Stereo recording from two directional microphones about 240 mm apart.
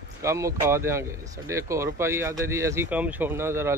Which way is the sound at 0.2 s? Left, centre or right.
Centre.